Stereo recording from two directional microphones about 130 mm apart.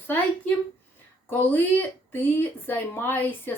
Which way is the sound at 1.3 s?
15° left (ahead or behind).